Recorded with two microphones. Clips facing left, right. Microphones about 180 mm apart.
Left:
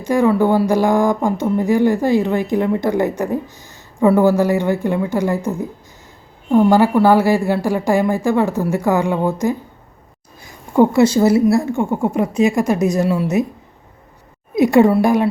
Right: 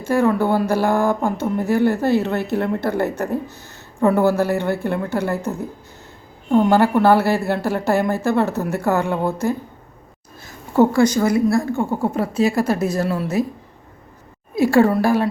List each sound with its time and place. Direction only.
0.0 s speech: 15° left (ahead or behind)
6.5 s speech: 10° left (ahead or behind)
10.4 s a sound: 15° left (ahead or behind)
11.0 s speech: 25° left (ahead or behind)
14.5 s speech: 20° left (ahead or behind)